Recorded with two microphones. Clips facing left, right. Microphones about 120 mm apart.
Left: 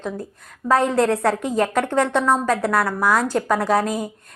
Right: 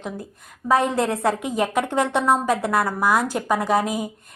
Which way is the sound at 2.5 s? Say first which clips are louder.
Left 1 dB; 20° right (ahead or behind).